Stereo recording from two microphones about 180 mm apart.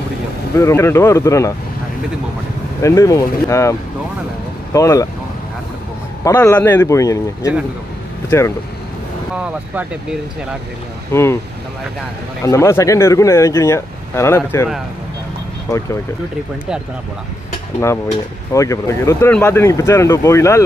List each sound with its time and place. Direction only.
0.6 s speech: 15° left (ahead or behind)
2.8 s speech: 20° left (ahead or behind)
4.7 s speech: 15° left (ahead or behind)
6.2 s speech: 15° left (ahead or behind)
9.4 s speech: 5° right (ahead or behind)
11.1 s speech: 15° left (ahead or behind)
12.4 s speech: 15° left (ahead or behind)
17.7 s speech: 15° left (ahead or behind)